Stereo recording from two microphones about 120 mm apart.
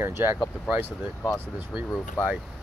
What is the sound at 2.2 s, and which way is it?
Speech, 10° left (ahead or behind).